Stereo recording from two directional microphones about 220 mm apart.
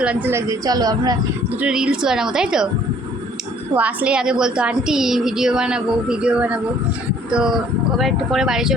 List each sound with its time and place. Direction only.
0.0 s speech: 5° right (ahead or behind)
1.6 s a woman's voice: 5° right (ahead or behind)
3.8 s a woman's voice: 5° right (ahead or behind)